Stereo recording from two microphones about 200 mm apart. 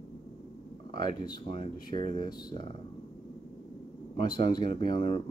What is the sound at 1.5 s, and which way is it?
Speech, 45° right (ahead or behind).